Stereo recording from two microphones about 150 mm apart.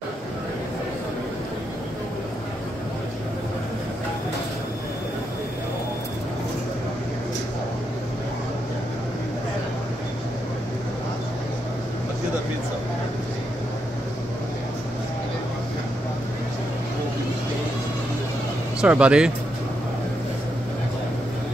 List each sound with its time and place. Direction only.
18.8 s speech: 5° right (ahead or behind)